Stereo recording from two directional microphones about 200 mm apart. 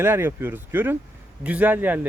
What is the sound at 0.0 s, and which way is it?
Speech, 10° right (ahead or behind).